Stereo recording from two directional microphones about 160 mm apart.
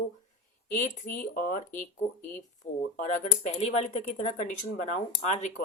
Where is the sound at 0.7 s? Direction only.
55° left (ahead or behind).